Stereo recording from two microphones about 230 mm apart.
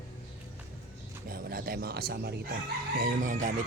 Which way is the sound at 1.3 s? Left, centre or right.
Right.